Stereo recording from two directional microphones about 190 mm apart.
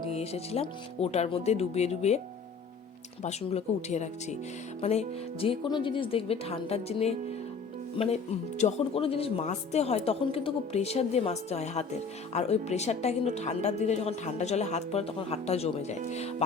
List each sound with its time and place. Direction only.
0.1 s speech: 35° left (ahead or behind)
3.2 s speech: 35° left (ahead or behind)